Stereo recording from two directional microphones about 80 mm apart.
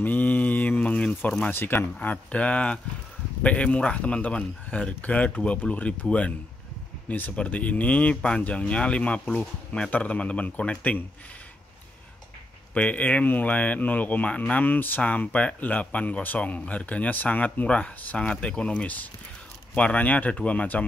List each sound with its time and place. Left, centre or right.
0.0 s mantra: left
1.5 s speech: left
12.7 s speech: centre